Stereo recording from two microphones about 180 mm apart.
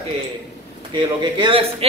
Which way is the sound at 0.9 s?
25° right (ahead or behind).